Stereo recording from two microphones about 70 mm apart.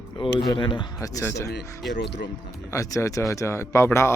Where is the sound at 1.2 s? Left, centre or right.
Left.